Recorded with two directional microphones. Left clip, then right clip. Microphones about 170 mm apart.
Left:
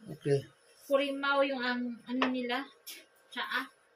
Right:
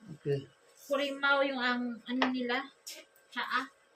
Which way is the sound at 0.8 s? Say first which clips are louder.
Even; 30° right (ahead or behind).